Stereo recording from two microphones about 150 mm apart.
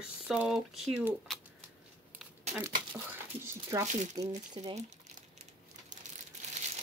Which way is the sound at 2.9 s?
15° right (ahead or behind).